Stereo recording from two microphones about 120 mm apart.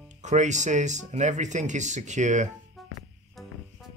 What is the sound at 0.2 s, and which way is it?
Speech, 75° right (ahead or behind).